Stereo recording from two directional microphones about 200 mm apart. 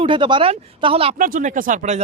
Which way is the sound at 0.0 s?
25° right (ahead or behind).